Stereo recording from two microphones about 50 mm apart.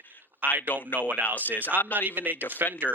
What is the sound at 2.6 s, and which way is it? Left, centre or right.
Speech, right.